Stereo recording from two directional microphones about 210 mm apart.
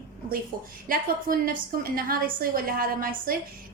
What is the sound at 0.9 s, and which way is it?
A woman's voice, 40° right (ahead or behind).